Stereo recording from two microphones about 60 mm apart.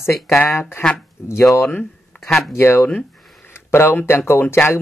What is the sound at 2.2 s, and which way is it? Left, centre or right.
Speech, centre.